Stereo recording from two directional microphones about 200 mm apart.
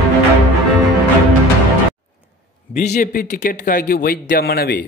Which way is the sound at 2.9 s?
45° left (ahead or behind).